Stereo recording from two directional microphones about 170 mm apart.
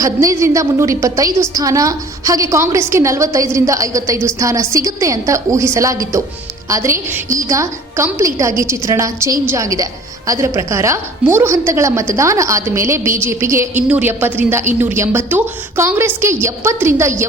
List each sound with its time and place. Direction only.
0.0 s a woman's voice: 20° right (ahead or behind)